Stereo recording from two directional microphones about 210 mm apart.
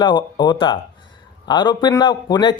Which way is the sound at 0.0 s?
20° left (ahead or behind).